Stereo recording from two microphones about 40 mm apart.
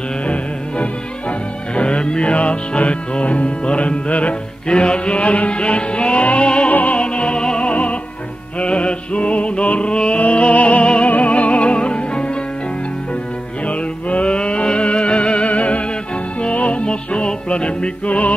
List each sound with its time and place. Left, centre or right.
0.2 s music: left
5.2 s music: left
7.0 s music: left
13.7 s music: left
18.0 s music: left